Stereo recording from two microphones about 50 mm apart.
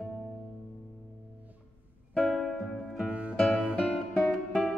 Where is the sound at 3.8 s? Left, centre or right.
Centre.